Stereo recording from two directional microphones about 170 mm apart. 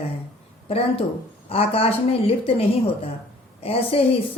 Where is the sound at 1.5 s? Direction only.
35° left (ahead or behind).